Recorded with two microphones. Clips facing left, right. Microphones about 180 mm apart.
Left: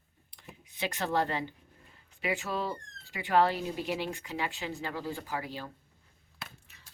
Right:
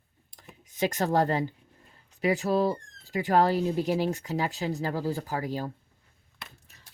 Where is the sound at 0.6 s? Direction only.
45° right (ahead or behind).